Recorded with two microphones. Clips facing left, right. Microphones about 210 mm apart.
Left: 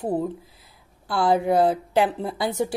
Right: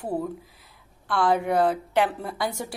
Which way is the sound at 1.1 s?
30° left (ahead or behind).